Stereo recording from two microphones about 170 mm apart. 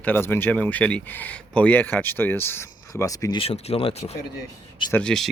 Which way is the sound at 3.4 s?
35° left (ahead or behind).